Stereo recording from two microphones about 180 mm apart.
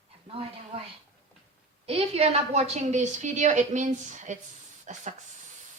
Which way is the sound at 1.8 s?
35° right (ahead or behind).